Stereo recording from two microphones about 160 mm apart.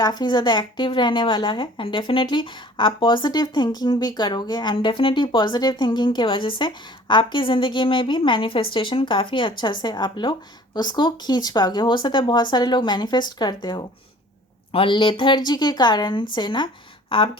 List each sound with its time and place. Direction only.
0.0 s a woman's voice: 25° left (ahead or behind)